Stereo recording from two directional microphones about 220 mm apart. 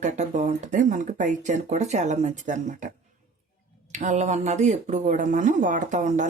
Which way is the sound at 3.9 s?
30° right (ahead or behind).